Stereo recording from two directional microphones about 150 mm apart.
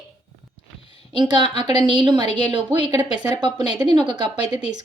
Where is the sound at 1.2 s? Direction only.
30° right (ahead or behind).